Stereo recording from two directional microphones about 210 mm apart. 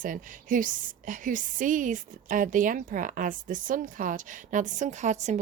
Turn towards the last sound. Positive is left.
turn(degrees=-35)  # may be behind; listen again after turning